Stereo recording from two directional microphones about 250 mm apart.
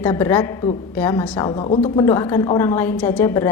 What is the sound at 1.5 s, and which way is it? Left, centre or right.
A woman's voice, left.